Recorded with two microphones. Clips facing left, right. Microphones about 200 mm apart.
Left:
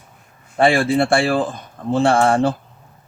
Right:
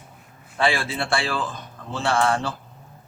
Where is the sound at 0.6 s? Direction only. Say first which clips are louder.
Left 9 dB; 55° left (ahead or behind).